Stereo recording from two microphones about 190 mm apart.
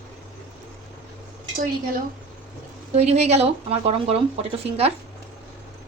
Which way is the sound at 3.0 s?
35° right (ahead or behind).